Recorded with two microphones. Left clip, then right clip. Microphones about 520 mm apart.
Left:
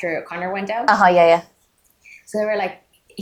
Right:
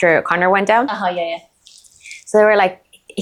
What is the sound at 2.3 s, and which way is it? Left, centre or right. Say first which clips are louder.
Speech: right 10 dB; right.